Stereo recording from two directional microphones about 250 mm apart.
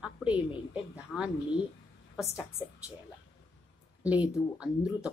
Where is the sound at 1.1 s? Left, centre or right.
Centre.